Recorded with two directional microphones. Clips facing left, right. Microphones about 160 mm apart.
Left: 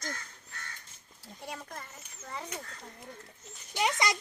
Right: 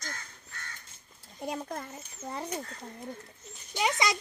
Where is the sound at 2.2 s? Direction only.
40° right (ahead or behind).